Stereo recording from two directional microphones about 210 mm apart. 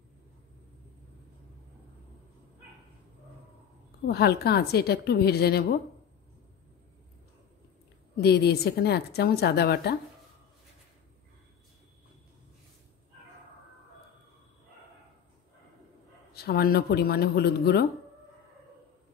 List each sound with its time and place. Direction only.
4.0 s a woman's voice: 50° left (ahead or behind)
8.2 s a woman's voice: 50° left (ahead or behind)
16.3 s a woman's voice: 45° left (ahead or behind)